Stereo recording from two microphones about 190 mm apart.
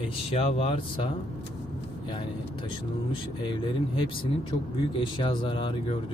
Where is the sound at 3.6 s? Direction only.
25° left (ahead or behind).